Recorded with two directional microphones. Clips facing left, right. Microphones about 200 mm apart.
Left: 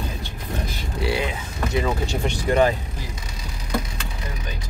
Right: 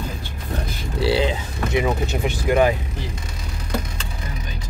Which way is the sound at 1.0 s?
30° right (ahead or behind).